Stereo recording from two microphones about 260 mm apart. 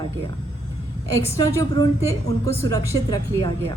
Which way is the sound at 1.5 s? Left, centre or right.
Centre.